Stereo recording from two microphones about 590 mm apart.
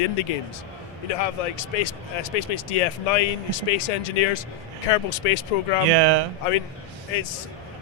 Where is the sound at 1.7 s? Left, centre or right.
Left.